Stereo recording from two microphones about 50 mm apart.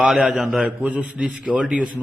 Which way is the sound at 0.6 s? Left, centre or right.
Right.